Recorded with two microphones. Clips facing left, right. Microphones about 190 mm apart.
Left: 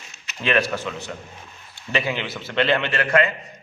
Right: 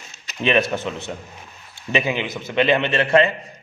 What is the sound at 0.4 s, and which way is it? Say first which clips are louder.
A man's voice: right 3 dB; 20° right (ahead or behind).